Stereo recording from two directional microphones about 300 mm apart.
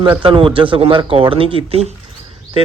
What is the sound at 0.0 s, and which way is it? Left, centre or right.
Speech, centre.